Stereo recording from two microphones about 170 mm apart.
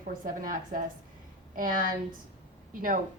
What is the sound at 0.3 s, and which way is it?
A woman's voice, 55° right (ahead or behind).